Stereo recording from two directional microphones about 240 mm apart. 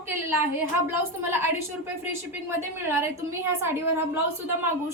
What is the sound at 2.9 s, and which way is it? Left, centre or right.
Speech, centre.